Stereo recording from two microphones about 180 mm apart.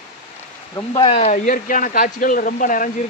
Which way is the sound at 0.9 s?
30° left (ahead or behind).